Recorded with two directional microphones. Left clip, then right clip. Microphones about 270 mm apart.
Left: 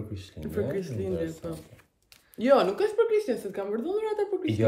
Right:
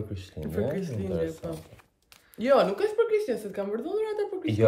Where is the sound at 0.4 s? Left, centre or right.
Centre.